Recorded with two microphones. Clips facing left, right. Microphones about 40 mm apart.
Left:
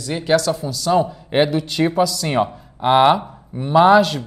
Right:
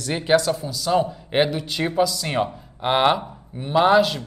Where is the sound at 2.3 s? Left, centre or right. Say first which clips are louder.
Left 4 dB; centre.